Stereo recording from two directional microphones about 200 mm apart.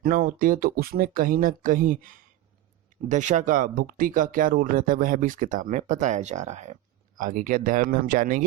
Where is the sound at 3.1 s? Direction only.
40° right (ahead or behind).